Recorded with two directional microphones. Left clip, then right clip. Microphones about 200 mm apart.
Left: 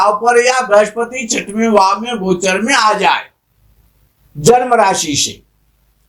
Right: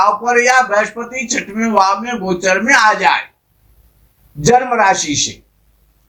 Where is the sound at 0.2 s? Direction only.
35° left (ahead or behind).